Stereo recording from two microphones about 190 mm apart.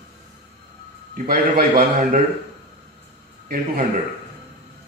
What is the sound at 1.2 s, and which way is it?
Speech, 45° right (ahead or behind).